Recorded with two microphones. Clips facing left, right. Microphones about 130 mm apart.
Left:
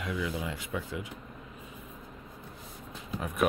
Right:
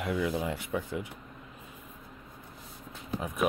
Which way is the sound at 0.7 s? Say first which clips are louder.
Right 2 dB; 30° right (ahead or behind).